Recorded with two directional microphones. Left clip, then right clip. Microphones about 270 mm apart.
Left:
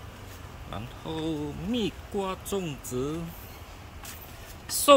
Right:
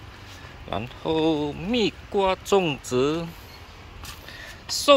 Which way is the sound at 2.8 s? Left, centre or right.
Right.